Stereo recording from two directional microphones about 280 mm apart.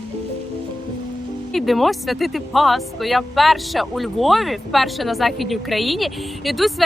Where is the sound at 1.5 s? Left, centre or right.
Centre.